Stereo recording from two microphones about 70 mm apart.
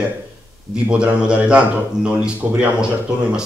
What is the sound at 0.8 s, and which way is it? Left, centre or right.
Speech, centre.